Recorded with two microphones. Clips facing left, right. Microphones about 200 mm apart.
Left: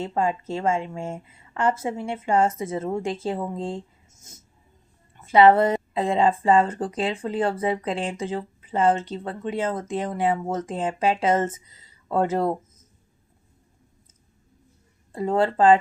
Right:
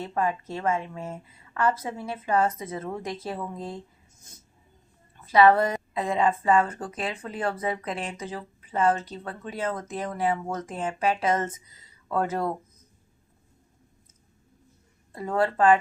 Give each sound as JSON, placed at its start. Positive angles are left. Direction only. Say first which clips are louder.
{"t": 0.0, "sound": "speech", "louder": "left 3 dB", "side_deg": 30}
{"t": 5.2, "sound": "speech", "louder": "left 3 dB", "side_deg": 25}
{"t": 15.1, "sound": "speech", "louder": "left 4 dB", "side_deg": 25}